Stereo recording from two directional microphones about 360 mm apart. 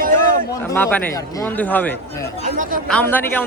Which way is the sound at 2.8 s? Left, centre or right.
Centre.